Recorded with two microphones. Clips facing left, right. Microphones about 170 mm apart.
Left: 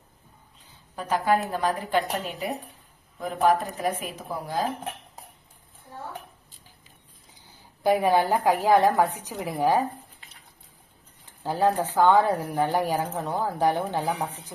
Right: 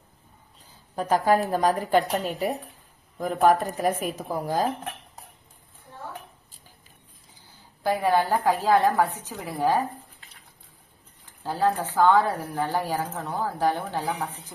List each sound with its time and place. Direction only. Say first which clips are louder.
0.9 s a woman's voice: right 2 dB; 40° right (ahead or behind)
7.4 s speech: left 3 dB; 15° left (ahead or behind)
11.4 s speech: left 1 dB; 15° left (ahead or behind)